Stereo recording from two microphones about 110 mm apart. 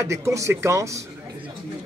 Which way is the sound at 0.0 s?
25° right (ahead or behind).